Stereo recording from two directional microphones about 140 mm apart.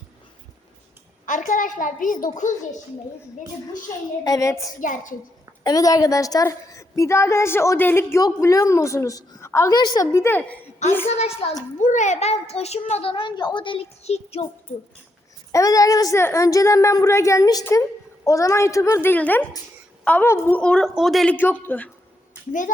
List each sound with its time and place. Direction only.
1.2 s a child's voice: 70° left (ahead or behind)
4.2 s a woman's voice: 25° left (ahead or behind)
4.8 s a child's voice: 70° left (ahead or behind)
5.6 s a woman's voice: 25° left (ahead or behind)
10.8 s a woman's voice: 55° left (ahead or behind)
11.8 s a child's voice: 60° left (ahead or behind); by 14.4 s 45° left (ahead or behind)
15.5 s a woman's voice: 25° left (ahead or behind); by 21.3 s centre (ahead or behind)
21.3 s a woman's voice: 15° left (ahead or behind)